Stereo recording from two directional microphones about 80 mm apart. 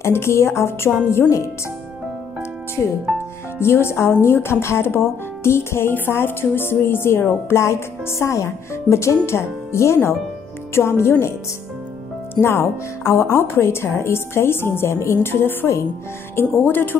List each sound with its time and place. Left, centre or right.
0.0 s speech: left
3.1 s music: centre
3.5 s speech: left
12.4 s speech: left